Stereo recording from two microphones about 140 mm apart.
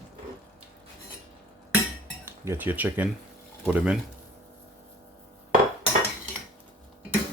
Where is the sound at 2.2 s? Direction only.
15° right (ahead or behind).